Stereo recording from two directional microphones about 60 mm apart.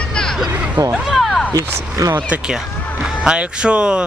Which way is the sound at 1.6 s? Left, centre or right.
Right.